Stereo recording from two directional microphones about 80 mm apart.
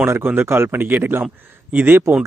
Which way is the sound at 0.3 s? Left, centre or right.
Right.